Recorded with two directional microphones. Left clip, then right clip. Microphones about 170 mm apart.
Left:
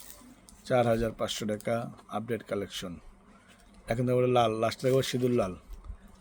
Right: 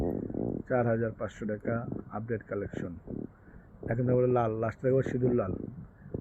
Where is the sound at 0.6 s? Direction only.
40° left (ahead or behind).